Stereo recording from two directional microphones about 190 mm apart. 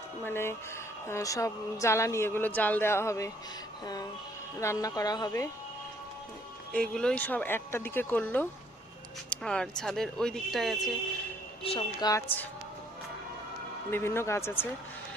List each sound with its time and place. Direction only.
0.3 s a woman's voice: 15° left (ahead or behind)
4.6 s a woman's voice: 15° left (ahead or behind)
6.7 s a woman's voice: 5° left (ahead or behind)
11.6 s speech: 30° left (ahead or behind)
13.9 s a woman's voice: 10° left (ahead or behind)